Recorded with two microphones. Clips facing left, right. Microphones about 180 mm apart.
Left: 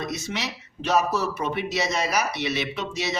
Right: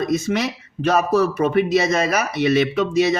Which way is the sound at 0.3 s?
55° right (ahead or behind).